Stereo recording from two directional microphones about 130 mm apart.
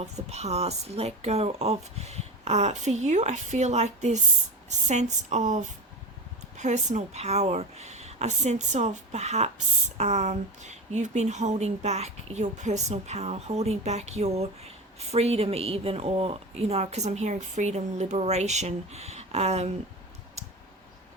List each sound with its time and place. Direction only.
0.0 s a woman's voice: 55° right (ahead or behind)